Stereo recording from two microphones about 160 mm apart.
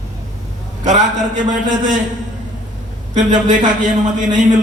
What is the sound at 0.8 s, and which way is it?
Speech, 50° right (ahead or behind).